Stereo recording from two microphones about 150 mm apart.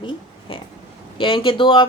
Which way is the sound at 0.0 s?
35° left (ahead or behind).